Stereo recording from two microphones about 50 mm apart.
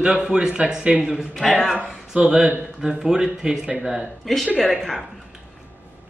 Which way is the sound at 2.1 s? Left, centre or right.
Right.